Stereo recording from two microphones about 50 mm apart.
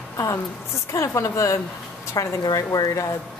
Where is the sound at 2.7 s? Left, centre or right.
Left.